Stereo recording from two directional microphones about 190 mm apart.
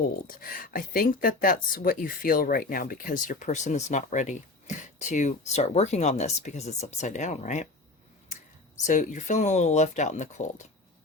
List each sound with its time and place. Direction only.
0.3 s speech: 50° left (ahead or behind)
8.9 s speech: 40° left (ahead or behind)